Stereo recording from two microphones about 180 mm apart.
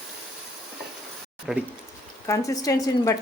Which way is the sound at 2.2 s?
20° left (ahead or behind).